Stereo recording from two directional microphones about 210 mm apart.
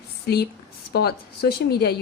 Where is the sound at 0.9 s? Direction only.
50° left (ahead or behind).